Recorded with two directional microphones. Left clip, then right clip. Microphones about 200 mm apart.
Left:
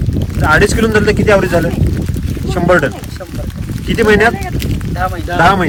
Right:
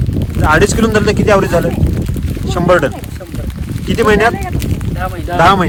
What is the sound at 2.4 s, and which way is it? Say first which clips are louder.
Speech: even; 30° right (ahead or behind).